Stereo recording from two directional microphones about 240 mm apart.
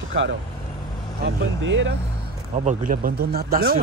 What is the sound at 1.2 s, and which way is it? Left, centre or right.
Speech, right.